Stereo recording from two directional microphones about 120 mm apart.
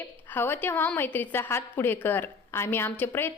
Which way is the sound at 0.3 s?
15° left (ahead or behind).